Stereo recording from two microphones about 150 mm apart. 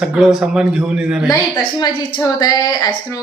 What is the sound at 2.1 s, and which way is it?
Speech, 25° left (ahead or behind).